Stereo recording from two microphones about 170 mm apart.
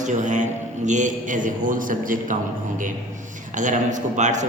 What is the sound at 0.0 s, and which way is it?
A man's voice, 45° right (ahead or behind).